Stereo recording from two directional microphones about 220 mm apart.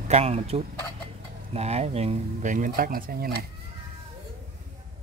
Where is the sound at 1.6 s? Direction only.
30° right (ahead or behind).